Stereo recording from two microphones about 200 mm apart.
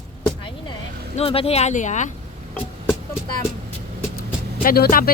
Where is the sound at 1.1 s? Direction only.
30° left (ahead or behind).